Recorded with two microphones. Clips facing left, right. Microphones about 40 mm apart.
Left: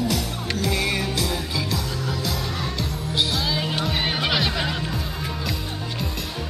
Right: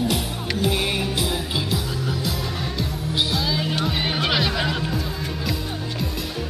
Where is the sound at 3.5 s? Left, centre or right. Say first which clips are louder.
Right 1 dB; centre.